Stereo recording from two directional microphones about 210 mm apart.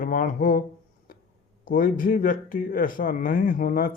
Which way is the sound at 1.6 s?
40° left (ahead or behind).